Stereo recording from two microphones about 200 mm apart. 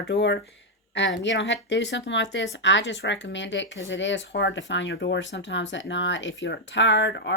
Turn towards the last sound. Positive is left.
turn(degrees=65)  # may be behind; listen again after turning